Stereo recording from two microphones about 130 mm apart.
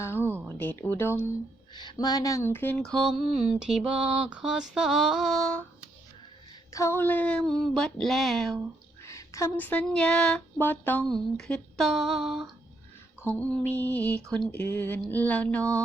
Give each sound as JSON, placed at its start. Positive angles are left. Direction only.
{"t": 0.0, "sound": "a sound", "side_deg": 20}
{"t": 0.4, "sound": "speech", "side_deg": 15}
{"t": 1.7, "sound": "mantra", "side_deg": 35}
{"t": 6.7, "sound": "mantra", "side_deg": 25}
{"t": 9.0, "sound": "a sound", "side_deg": 25}
{"t": 11.1, "sound": "mantra", "side_deg": 5}
{"t": 13.2, "sound": "speech", "side_deg": 10}